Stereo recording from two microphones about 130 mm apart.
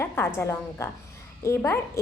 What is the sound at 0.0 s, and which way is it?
A woman's voice, 20° left (ahead or behind).